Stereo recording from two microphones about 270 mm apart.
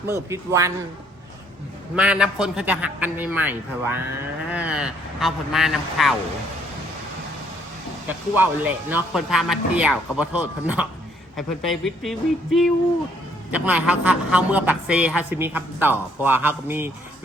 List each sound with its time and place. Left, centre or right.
0.1 s a man's voice: centre
2.0 s a man's voice: centre
8.0 s a man's voice: centre